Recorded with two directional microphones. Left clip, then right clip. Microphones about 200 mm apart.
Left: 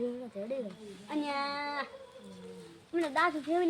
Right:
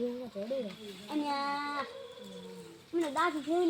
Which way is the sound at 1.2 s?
10° right (ahead or behind).